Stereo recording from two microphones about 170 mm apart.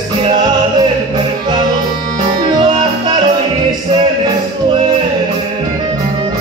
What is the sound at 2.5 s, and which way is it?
Music, 25° right (ahead or behind).